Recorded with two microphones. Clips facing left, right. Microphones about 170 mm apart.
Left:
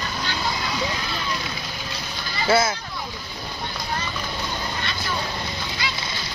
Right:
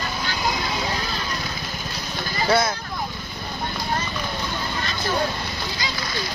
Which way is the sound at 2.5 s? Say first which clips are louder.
Left 1 dB; 5° left (ahead or behind).